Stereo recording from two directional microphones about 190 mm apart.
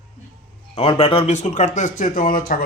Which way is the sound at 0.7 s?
30° left (ahead or behind).